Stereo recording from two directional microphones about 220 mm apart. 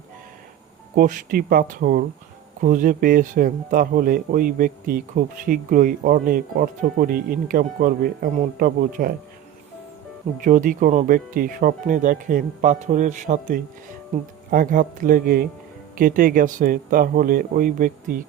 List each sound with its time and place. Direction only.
0.9 s speech: 40° right (ahead or behind)
10.4 s speech: 35° right (ahead or behind)